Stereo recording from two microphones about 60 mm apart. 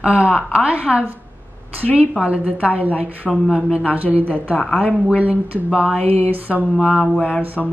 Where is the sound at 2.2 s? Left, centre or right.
Right.